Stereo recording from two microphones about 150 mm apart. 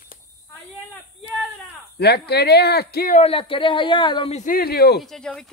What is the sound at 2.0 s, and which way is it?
Speech, 90° left.